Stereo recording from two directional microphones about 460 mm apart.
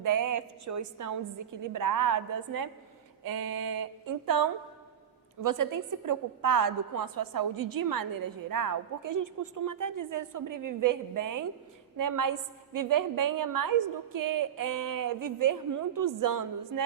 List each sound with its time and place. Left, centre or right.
0.0 s a woman's voice: right